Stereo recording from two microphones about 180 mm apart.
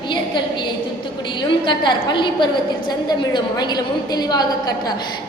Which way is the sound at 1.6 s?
25° left (ahead or behind).